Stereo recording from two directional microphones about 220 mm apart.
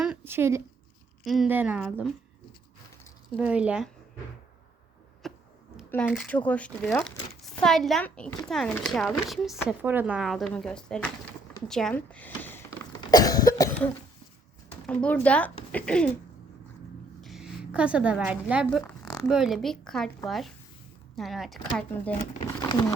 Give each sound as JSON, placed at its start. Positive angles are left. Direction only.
{"t": 0.0, "sound": "a sound", "side_deg": -5}
{"t": 1.2, "sound": "speech", "side_deg": 0}
{"t": 3.3, "sound": "speech", "side_deg": -5}
{"t": 5.2, "sound": "a sound", "side_deg": 0}
{"t": 5.9, "sound": "speech", "side_deg": 5}
{"t": 13.0, "sound": "cough", "side_deg": 20}
{"t": 14.8, "sound": "speech", "side_deg": 5}
{"t": 17.2, "sound": "a woman's voice", "side_deg": 0}